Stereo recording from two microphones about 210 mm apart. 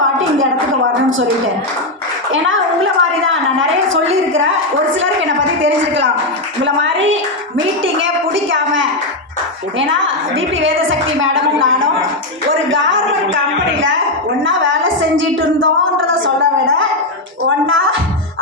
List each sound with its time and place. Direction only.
2.3 s a woman's voice: 65° right (ahead or behind)
14.4 s a woman's voice: 65° right (ahead or behind)